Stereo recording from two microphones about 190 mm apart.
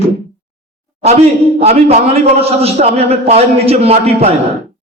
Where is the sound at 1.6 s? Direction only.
35° right (ahead or behind).